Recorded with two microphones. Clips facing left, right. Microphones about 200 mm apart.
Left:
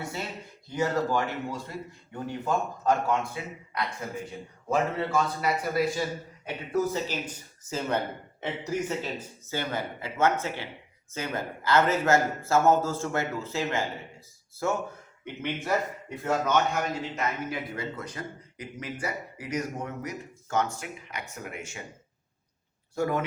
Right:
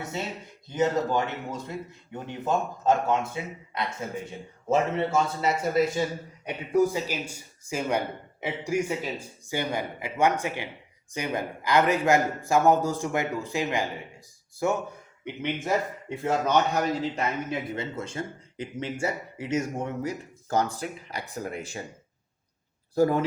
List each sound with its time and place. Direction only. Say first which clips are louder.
0.0 s a sound: right 2 dB; 20° right (ahead or behind)
0.7 s a man's voice: right 2 dB; 20° right (ahead or behind)
23.0 s speech: right 6 dB; 35° right (ahead or behind)